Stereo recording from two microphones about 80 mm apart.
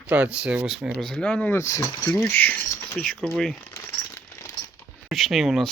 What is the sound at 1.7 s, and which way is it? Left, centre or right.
Speech, left.